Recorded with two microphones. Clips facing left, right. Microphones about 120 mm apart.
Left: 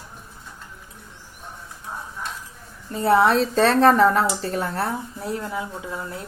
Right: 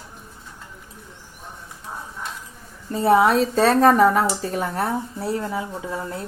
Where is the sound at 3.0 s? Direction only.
20° right (ahead or behind).